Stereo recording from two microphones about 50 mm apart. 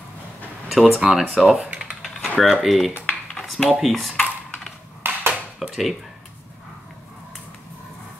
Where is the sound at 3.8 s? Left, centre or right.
Centre.